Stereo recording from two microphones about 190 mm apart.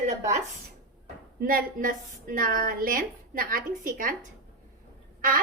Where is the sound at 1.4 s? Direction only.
50° right (ahead or behind).